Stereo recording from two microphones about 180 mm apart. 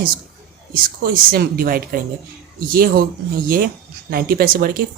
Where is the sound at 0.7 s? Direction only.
55° right (ahead or behind).